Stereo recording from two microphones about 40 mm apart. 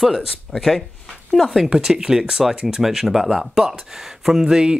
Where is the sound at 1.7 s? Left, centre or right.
Centre.